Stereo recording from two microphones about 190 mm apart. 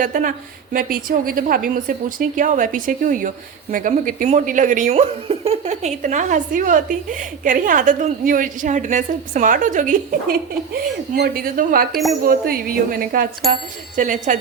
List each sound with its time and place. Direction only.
0.0 s a woman's voice: 45° right (ahead or behind)
11.1 s a woman's voice: 50° right (ahead or behind)